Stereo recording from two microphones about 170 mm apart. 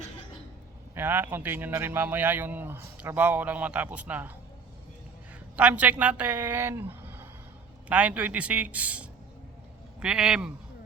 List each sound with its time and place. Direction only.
0.9 s speech: 10° right (ahead or behind)
5.5 s speech: 10° right (ahead or behind)